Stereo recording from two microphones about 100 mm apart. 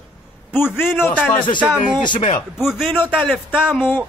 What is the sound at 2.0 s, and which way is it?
Speech, 55° left (ahead or behind).